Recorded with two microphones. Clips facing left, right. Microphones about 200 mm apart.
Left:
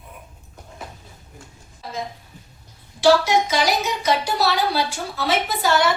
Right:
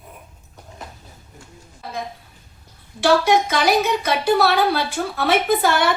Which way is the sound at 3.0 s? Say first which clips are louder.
Even; 60° right (ahead or behind).